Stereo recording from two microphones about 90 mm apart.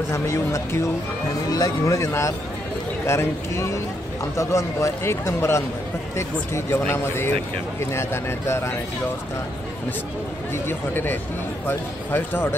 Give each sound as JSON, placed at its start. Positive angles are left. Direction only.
{"t": 0.1, "sound": "a man's voice", "side_deg": 35}
{"t": 10.5, "sound": "speech", "side_deg": 25}